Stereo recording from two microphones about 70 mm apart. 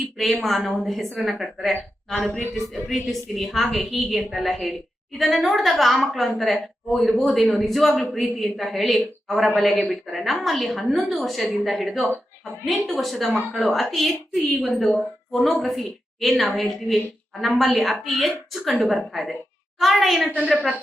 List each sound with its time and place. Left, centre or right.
0.4 s a woman's voice: centre
20.2 s a woman's voice: centre